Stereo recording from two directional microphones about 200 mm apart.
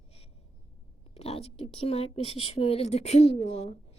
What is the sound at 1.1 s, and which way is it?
A woman's voice, 30° left (ahead or behind).